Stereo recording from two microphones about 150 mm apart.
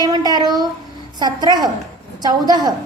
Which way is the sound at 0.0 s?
25° right (ahead or behind).